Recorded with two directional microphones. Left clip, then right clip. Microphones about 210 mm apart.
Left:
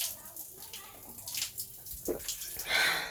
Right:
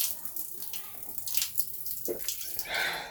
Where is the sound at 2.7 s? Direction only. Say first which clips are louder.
Left 3 dB; 20° left (ahead or behind).